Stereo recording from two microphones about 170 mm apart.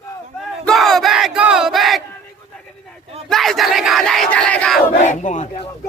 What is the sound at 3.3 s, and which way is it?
Speech, centre (ahead or behind).